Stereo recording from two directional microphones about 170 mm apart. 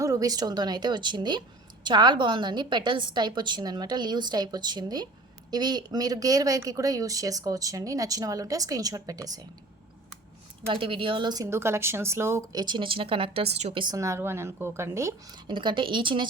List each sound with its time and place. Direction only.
0.0 s a woman's voice: 20° right (ahead or behind)
10.7 s a woman's voice: 30° right (ahead or behind)
13.8 s speech: 20° right (ahead or behind)
15.5 s a woman's voice: 30° right (ahead or behind)